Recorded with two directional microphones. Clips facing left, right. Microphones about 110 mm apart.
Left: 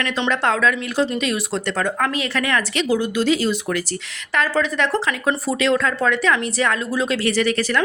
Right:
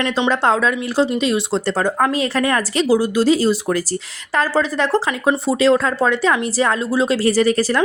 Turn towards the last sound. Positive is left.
turn(degrees=-35)  # may be behind; listen again after turning